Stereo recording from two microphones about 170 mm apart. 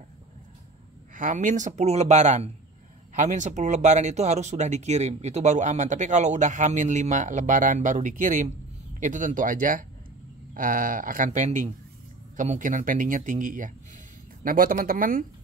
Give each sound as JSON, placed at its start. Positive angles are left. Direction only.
{"t": 1.1, "sound": "speech", "side_deg": -50}